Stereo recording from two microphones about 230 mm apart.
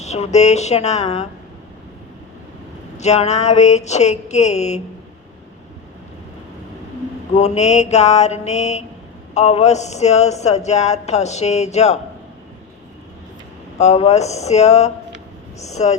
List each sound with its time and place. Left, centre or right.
0.0 s speech: left
3.0 s speech: left
7.3 s speech: left
13.7 s speech: left